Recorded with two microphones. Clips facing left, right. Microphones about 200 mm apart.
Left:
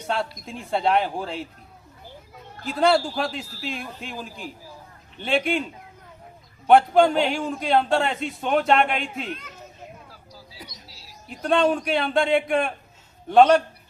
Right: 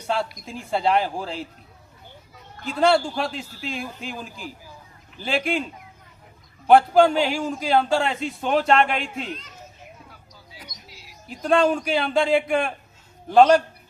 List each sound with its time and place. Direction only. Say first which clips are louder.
0.1 s a man's voice: right 2 dB; centre (ahead or behind)
2.6 s a man's voice: right 1 dB; centre (ahead or behind)
6.7 s a man's voice: right 1 dB; centre (ahead or behind)
10.1 s music: left 2 dB; 30° left (ahead or behind)
11.3 s a man's voice: right 1 dB; centre (ahead or behind)